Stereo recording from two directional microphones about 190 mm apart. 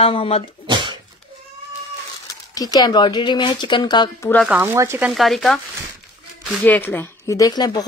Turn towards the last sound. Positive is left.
turn(degrees=20)  # may be behind; listen again after turning